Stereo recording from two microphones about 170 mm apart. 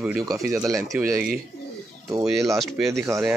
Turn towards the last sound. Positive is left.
turn(degrees=-15)  # may be behind; listen again after turning